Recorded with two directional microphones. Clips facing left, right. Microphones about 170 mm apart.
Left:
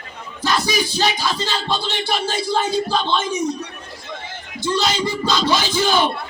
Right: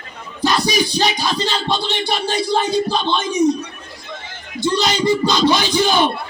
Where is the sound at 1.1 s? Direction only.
20° right (ahead or behind).